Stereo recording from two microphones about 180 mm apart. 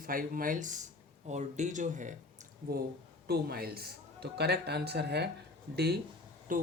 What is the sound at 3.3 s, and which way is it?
Speech, 60° right (ahead or behind).